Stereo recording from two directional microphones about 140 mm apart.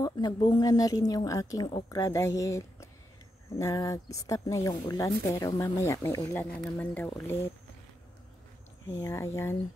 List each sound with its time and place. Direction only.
0.0 s a woman's voice: 30° left (ahead or behind)
8.8 s a woman's voice: 20° left (ahead or behind)